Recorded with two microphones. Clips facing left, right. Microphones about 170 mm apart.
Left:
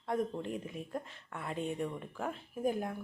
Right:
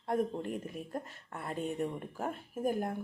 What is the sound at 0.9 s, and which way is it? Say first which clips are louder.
Speech: right 1 dB; 40° right (ahead or behind).